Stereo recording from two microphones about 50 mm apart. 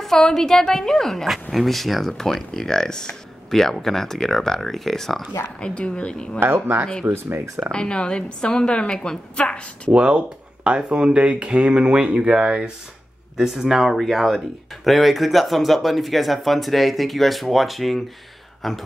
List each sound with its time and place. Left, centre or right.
0.0 s a woman's voice: centre
5.6 s speech: left
6.4 s speech: right
7.7 s a woman's voice: centre
9.9 s speech: right; by 18.8 s centre